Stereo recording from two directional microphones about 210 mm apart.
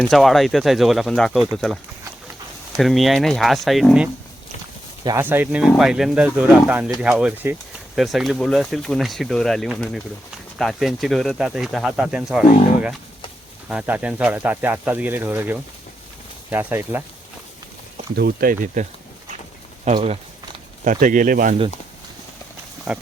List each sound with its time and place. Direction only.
0.0 s speech: centre (ahead or behind)
2.7 s speech: centre (ahead or behind)
18.2 s speech: 45° right (ahead or behind)
19.8 s a sound: 25° right (ahead or behind)
20.8 s speech: 40° right (ahead or behind)
22.9 s speech: 5° right (ahead or behind)